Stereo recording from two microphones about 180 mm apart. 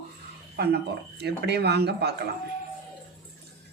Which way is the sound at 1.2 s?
65° right (ahead or behind).